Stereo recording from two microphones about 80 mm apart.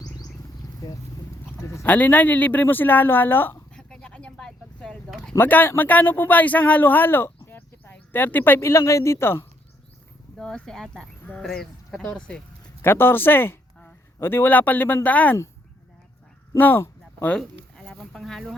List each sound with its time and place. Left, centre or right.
0.8 s speech: left
1.6 s speech: left
1.9 s speech: left
3.8 s a sound: centre
5.4 s speech: left
8.6 s speech: left
10.3 s speech: centre
12.8 s speech: left
16.6 s a sound: left
17.2 s a sound: centre